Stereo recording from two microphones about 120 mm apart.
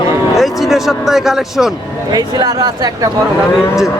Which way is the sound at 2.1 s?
35° right (ahead or behind).